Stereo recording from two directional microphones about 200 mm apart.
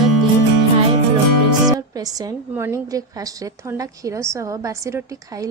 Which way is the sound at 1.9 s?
20° right (ahead or behind).